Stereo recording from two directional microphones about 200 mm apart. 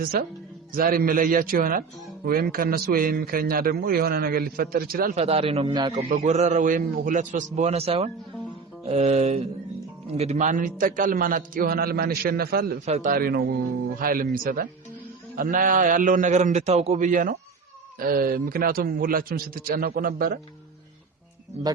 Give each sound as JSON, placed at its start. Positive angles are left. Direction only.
{"t": 0.0, "sound": "a man's voice", "side_deg": -45}
{"t": 5.1, "sound": "a man's voice", "side_deg": -30}
{"t": 6.2, "sound": "a man's voice", "side_deg": -35}
{"t": 12.8, "sound": "a man's voice", "side_deg": -35}